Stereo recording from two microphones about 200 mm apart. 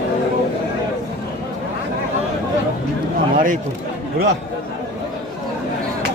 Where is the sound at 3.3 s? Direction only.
40° right (ahead or behind).